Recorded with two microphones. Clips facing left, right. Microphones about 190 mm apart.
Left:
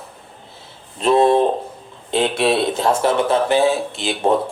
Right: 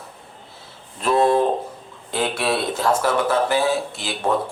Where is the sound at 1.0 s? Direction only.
25° left (ahead or behind).